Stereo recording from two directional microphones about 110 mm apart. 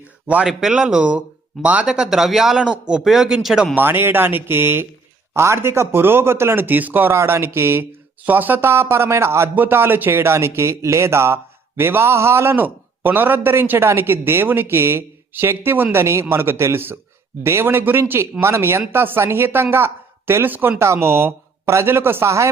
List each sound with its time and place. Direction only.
0.3 s speech: 5° right (ahead or behind)
3.8 s speech: 20° right (ahead or behind)